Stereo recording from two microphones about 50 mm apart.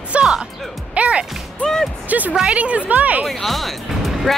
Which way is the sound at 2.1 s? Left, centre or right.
Right.